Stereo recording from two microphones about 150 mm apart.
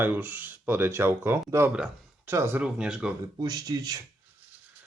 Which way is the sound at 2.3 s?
20° right (ahead or behind).